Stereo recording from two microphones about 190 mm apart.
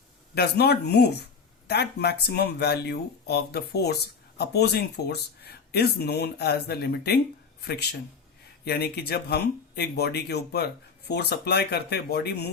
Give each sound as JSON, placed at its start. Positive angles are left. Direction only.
{"t": 0.3, "sound": "speech", "side_deg": 60}